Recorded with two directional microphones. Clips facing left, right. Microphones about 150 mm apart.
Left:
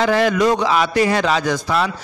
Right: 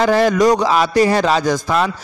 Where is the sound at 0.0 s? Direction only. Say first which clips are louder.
Right 3 dB; 40° right (ahead or behind).